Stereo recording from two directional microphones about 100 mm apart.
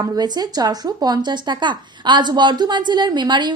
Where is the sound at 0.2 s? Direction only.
40° right (ahead or behind).